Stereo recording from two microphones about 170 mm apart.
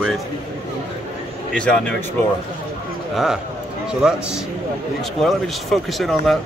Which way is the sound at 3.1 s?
5° right (ahead or behind).